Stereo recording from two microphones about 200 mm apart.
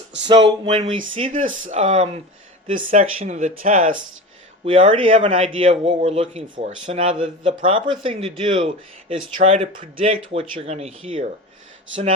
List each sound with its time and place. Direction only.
0.3 s a man's voice: 25° right (ahead or behind)
1.3 s speech: 40° right (ahead or behind)
4.6 s a man's voice: 30° right (ahead or behind)
9.4 s speech: 35° right (ahead or behind)